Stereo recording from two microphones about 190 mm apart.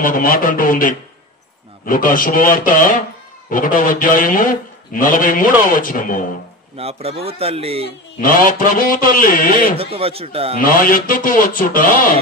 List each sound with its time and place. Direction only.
0.0 s a man's voice: 45° left (ahead or behind)
6.8 s speech: 30° right (ahead or behind)
8.2 s a man's voice: 45° left (ahead or behind)
9.8 s speech: 30° right (ahead or behind)
10.6 s a man's voice: 45° left (ahead or behind)